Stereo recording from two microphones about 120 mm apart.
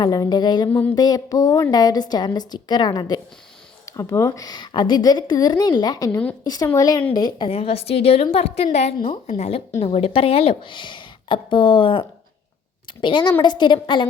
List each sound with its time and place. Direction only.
0.0 s a woman's voice: 35° left (ahead or behind)
0.7 s a sound: 10° left (ahead or behind)
0.9 s a woman's voice: 35° left (ahead or behind)
7.5 s a woman's voice: 55° left (ahead or behind)